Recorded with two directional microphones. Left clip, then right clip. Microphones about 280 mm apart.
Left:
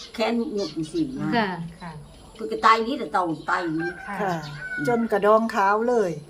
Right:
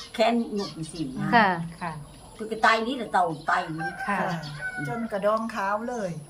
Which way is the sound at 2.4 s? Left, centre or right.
Centre.